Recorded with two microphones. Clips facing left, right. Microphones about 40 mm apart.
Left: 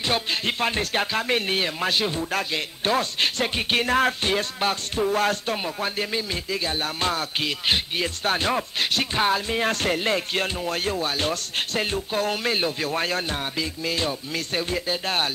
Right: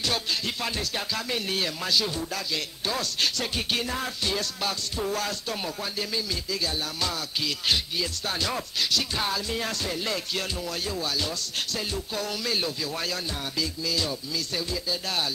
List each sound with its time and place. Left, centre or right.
0.0 s speech: left
3.8 s speech: left